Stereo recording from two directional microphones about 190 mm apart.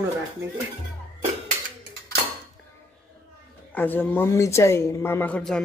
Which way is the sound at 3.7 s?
10° left (ahead or behind).